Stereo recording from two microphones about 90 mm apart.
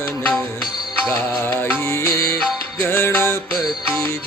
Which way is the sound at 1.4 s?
25° left (ahead or behind).